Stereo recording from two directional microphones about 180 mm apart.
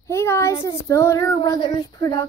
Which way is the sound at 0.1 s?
15° left (ahead or behind).